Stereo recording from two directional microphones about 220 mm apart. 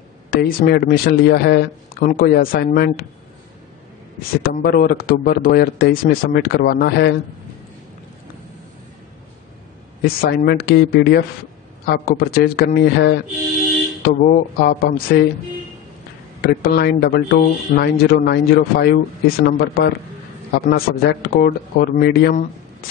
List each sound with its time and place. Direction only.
0.3 s speech: 40° left (ahead or behind)
4.4 s speech: 40° left (ahead or behind)
10.0 s speech: 45° left (ahead or behind)
16.3 s speech: 45° left (ahead or behind)